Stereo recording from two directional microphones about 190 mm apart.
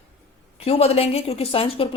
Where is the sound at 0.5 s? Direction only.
30° left (ahead or behind).